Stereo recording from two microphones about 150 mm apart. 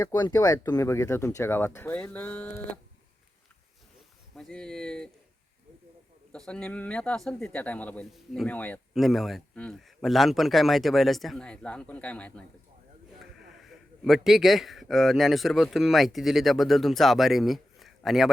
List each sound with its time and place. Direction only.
0.0 s speech: 20° left (ahead or behind)
4.4 s speech: 5° left (ahead or behind)
6.3 s speech: 5° left (ahead or behind)
13.6 s speech: centre (ahead or behind)